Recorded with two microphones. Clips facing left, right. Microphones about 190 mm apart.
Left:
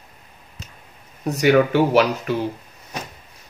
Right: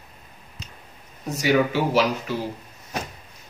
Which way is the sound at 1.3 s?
60° left (ahead or behind).